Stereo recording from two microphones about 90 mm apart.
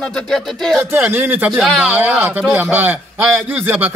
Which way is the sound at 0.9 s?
20° right (ahead or behind).